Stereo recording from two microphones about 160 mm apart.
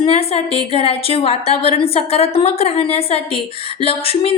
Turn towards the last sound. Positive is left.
turn(degrees=35)  # may be behind; listen again after turning